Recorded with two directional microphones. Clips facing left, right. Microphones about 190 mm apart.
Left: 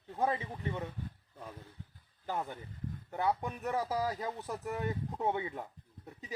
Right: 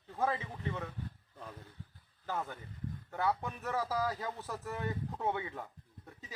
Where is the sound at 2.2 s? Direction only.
15° left (ahead or behind).